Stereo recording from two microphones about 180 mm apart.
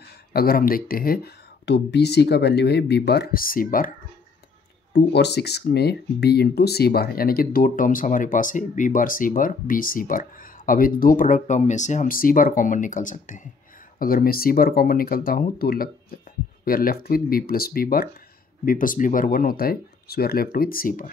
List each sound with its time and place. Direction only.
0.0 s speech: 60° left (ahead or behind)
4.9 s speech: 70° left (ahead or behind); by 21.1 s 50° left (ahead or behind)